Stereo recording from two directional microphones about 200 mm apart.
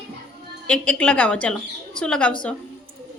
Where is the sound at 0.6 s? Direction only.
5° left (ahead or behind).